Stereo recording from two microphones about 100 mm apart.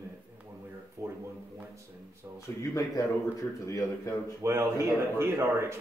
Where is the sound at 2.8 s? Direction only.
30° left (ahead or behind).